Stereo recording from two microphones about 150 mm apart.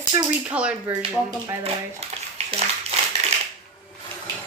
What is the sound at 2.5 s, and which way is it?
Clapping, 45° right (ahead or behind).